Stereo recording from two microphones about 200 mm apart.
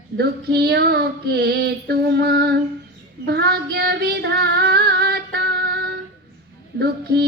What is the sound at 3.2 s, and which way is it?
Child singing, 55° right (ahead or behind).